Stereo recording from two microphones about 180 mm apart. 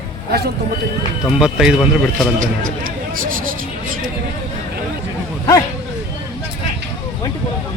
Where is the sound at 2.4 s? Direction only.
50° right (ahead or behind).